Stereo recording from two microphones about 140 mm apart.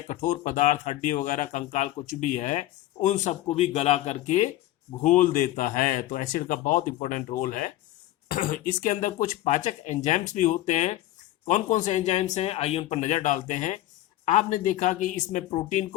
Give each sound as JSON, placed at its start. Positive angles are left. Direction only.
{"t": 0.1, "sound": "speech", "side_deg": 65}
{"t": 5.0, "sound": "speech", "side_deg": 65}